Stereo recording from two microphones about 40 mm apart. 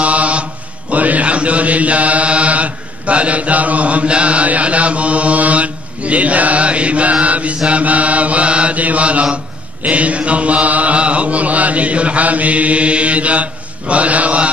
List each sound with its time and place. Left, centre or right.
0.0 s mantra: right
9.8 s chant: right